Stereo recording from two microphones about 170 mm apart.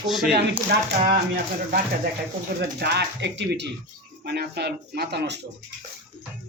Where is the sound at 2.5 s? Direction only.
75° right (ahead or behind); by 3.7 s 90° right.